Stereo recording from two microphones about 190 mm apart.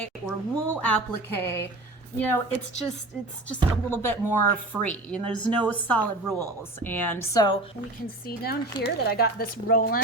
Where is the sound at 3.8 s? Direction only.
10° left (ahead or behind).